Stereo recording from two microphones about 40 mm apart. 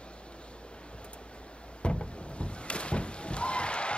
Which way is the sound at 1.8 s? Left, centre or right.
Left.